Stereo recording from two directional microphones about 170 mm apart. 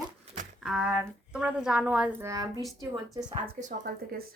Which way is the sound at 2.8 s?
20° right (ahead or behind).